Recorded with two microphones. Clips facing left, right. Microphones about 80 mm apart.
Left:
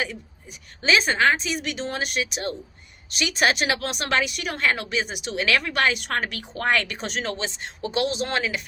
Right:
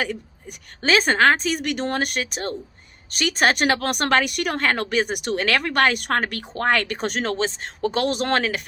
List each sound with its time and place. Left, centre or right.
0.0 s speech: right